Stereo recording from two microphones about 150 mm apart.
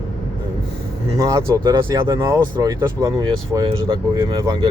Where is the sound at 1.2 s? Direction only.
20° right (ahead or behind).